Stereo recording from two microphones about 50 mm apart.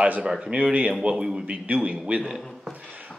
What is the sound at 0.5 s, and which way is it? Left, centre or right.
Speech, right.